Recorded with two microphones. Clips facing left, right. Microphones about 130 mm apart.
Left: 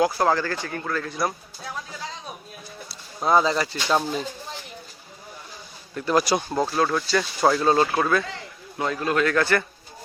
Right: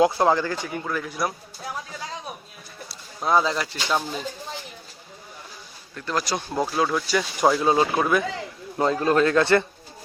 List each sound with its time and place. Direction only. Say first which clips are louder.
0.0 s speech: right 2 dB; 20° right (ahead or behind)
3.2 s speech: left 2 dB; centre (ahead or behind)
6.0 s speech: left 5 dB; 10° left (ahead or behind)
6.6 s speech: right 3 dB; 5° right (ahead or behind)
8.8 s a man's voice: right 4 dB; 30° right (ahead or behind)